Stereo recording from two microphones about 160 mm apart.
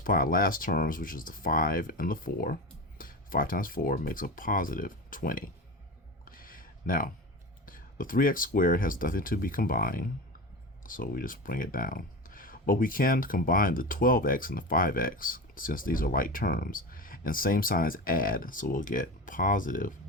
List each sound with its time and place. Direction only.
0.0 s speech: 60° left (ahead or behind)
6.2 s a sound: 60° left (ahead or behind)
7.6 s speech: 60° left (ahead or behind)